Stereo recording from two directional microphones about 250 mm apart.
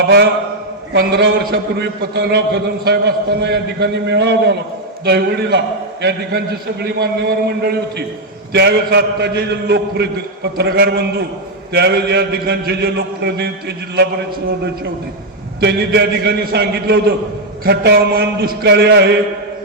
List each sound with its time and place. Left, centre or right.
0.9 s a man's voice: right
15.6 s a man's voice: right